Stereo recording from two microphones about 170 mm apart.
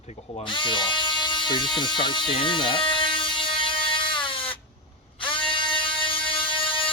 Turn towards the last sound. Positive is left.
turn(degrees=30)  # may be behind; listen again after turning